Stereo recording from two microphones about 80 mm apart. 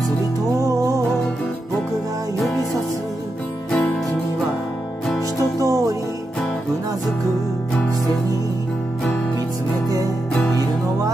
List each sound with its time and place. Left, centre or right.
0.6 s music: right
3.7 s music: centre
5.6 s music: right